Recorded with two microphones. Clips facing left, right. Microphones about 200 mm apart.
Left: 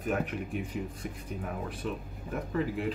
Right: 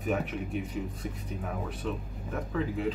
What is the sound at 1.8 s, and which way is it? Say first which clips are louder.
Speech: right 1 dB; 5° left (ahead or behind).